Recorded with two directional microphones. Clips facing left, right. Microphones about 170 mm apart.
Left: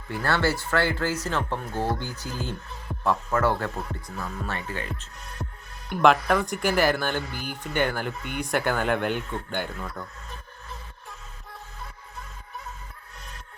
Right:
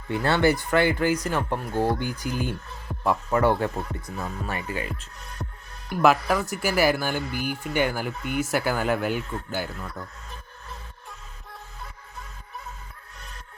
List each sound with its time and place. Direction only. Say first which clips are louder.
0.1 s speech: right 4 dB; 20° right (ahead or behind); by 10.1 s centre (ahead or behind)